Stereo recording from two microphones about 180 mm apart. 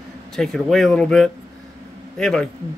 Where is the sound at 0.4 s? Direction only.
5° left (ahead or behind).